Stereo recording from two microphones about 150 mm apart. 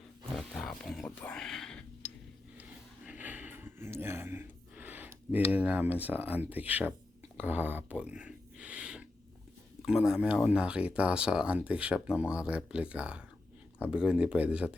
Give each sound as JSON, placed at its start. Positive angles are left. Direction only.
{"t": 0.3, "sound": "wild animals", "side_deg": 0}
{"t": 3.1, "sound": "gasp", "side_deg": -10}
{"t": 7.3, "sound": "a sound", "side_deg": -10}
{"t": 9.8, "sound": "speech", "side_deg": -5}